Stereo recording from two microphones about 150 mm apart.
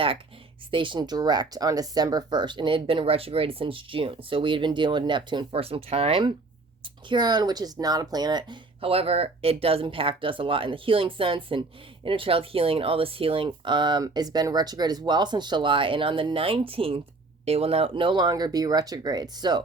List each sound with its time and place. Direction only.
0.7 s speech: 35° right (ahead or behind)